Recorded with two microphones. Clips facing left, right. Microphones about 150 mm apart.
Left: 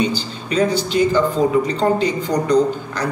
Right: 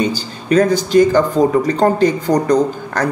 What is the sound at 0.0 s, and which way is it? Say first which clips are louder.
Speech: right 1 dB; 45° right (ahead or behind).